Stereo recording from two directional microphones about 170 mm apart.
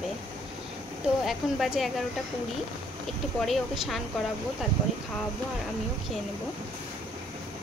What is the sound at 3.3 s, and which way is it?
Speech, centre (ahead or behind).